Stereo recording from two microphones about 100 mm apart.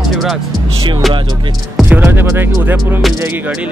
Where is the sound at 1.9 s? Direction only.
20° right (ahead or behind).